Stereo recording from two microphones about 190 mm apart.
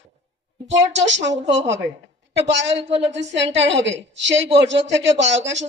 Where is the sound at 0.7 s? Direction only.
70° right (ahead or behind).